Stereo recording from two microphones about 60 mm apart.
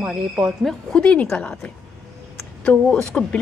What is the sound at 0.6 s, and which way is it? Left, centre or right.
Speech, centre.